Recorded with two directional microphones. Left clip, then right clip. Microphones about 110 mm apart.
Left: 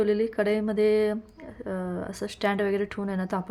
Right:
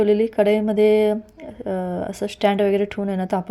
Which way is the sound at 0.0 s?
25° right (ahead or behind).